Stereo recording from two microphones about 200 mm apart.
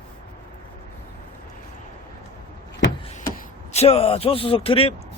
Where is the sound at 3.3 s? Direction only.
30° left (ahead or behind).